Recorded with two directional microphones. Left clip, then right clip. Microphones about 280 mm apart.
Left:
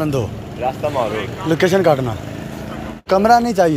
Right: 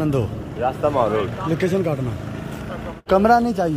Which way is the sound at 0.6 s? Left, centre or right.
Right.